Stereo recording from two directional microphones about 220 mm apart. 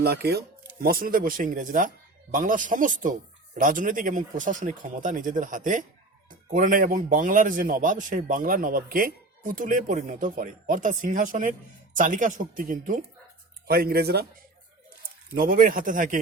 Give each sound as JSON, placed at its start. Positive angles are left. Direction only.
{"t": 0.0, "sound": "a man's voice", "side_deg": -45}
{"t": 15.4, "sound": "a man's voice", "side_deg": -40}